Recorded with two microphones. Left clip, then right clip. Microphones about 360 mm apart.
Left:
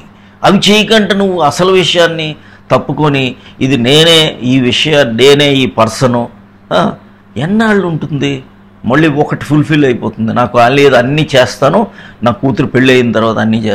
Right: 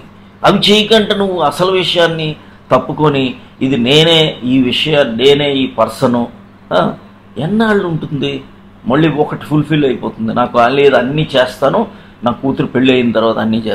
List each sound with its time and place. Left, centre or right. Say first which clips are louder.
0.4 s a man's voice: left 2 dB; left
7.3 s a man's voice: left 2 dB; left